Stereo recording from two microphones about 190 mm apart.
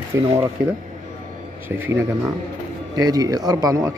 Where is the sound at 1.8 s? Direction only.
15° right (ahead or behind).